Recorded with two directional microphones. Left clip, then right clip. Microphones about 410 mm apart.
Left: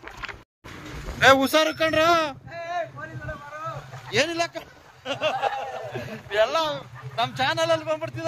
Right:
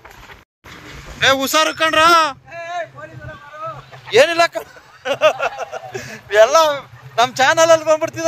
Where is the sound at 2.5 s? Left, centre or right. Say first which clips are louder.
Right 4 dB; centre.